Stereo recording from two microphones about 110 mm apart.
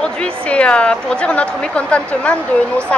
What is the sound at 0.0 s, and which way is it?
Speech, 10° left (ahead or behind).